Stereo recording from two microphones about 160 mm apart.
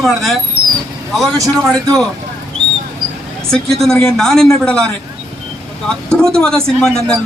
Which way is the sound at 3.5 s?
5° left (ahead or behind).